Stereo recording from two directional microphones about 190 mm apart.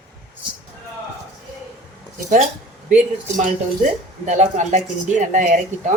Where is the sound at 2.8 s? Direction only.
40° right (ahead or behind).